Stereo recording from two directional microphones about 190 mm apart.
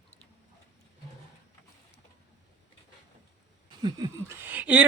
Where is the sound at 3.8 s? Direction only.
20° right (ahead or behind).